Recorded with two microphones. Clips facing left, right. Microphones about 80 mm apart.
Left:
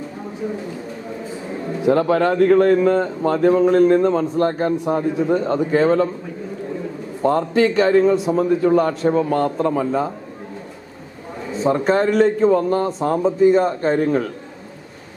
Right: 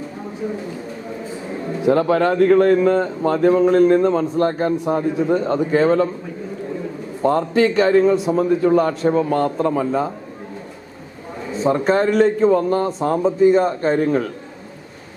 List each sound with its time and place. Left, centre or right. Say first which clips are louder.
1.9 s speech: even; centre
7.2 s speech: even; centre
11.6 s speech: even; centre